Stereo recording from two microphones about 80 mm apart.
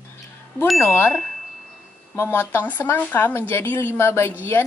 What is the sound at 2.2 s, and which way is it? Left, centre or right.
A woman's voice, left.